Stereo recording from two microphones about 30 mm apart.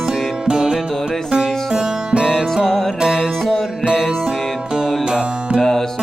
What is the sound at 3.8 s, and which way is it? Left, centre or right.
Music, right.